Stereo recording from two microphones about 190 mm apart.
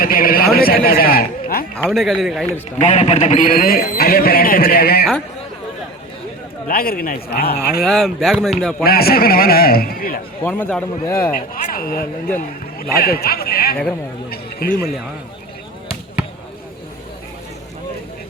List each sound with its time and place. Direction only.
0.0 s a sound: 50° left (ahead or behind)
1.9 s speech: centre (ahead or behind)
2.7 s a man's voice: 35° left (ahead or behind); by 5.0 s 55° left (ahead or behind)
6.7 s a man's voice: 50° left (ahead or behind)
7.8 s speech: centre (ahead or behind)
8.8 s a man's voice: 55° left (ahead or behind)
10.4 s a man's voice: 10° left (ahead or behind)
11.3 s a man's voice: 45° left (ahead or behind)
14.3 s a sound: 55° left (ahead or behind)